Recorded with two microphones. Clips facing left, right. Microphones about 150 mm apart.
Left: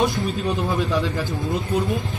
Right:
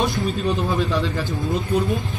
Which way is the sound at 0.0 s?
Centre (ahead or behind).